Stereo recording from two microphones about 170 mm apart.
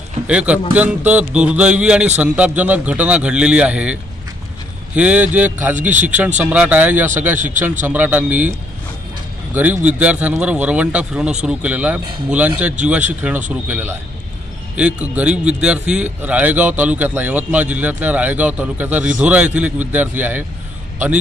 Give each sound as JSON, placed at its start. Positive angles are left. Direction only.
{"t": 0.3, "sound": "a man's voice", "side_deg": -5}
{"t": 5.8, "sound": "speech", "side_deg": -45}
{"t": 6.0, "sound": "a man's voice", "side_deg": -10}
{"t": 9.5, "sound": "a man's voice", "side_deg": -10}